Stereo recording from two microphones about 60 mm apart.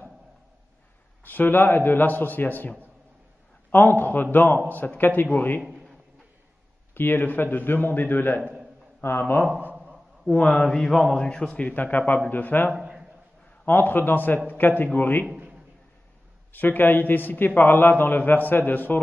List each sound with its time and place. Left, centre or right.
1.2 s a man's voice: left
3.7 s a man's voice: left
6.9 s a man's voice: left
9.2 s mantra: left
10.7 s a sound: centre
11.6 s a man's voice: left
12.7 s a sound: centre
13.7 s a man's voice: left
16.5 s a man's voice: left